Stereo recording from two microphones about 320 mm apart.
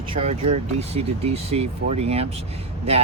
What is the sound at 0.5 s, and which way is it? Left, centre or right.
Speech, centre.